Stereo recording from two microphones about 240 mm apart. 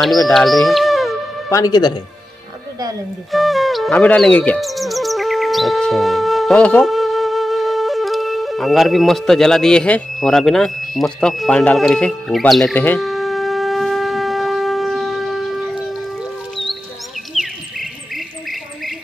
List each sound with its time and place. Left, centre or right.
0.0 s insect: centre
1.5 s speech: centre
3.3 s music: centre
17.3 s cricket: centre